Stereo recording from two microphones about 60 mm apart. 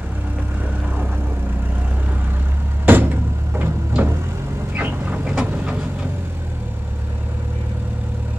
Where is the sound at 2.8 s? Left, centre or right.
Right.